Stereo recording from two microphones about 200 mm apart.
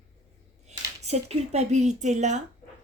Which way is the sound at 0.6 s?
35° right (ahead or behind).